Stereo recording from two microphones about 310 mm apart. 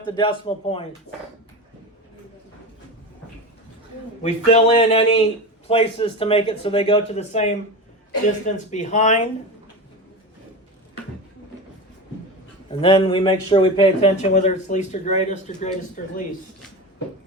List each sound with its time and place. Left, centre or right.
0.0 s speech: centre
4.2 s speech: left
12.8 s speech: centre